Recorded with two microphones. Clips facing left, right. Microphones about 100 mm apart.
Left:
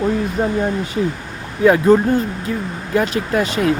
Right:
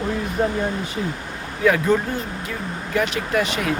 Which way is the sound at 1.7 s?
30° left (ahead or behind).